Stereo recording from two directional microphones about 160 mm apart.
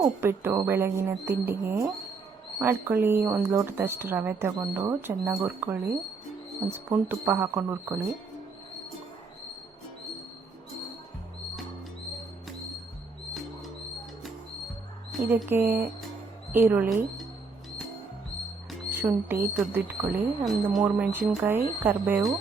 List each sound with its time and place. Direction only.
0.0 s speech: 15° right (ahead or behind)
15.1 s mouse: centre (ahead or behind)
15.4 s speech: 15° right (ahead or behind)
18.9 s speech: 15° right (ahead or behind)
20.4 s speech: centre (ahead or behind)
20.8 s speech: 15° right (ahead or behind)